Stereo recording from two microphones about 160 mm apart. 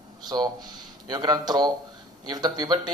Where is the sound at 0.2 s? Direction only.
25° right (ahead or behind).